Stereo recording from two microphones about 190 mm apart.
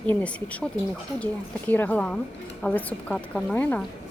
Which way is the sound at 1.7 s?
10° left (ahead or behind).